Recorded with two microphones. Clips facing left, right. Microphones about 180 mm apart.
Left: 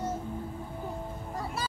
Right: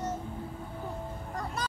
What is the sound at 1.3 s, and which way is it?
Vehicle, 5° left (ahead or behind).